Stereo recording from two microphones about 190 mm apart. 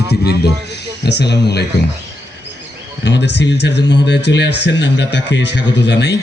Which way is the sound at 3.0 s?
65° left (ahead or behind).